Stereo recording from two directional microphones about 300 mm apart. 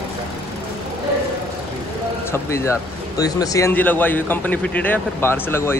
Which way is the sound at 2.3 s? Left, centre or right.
Centre.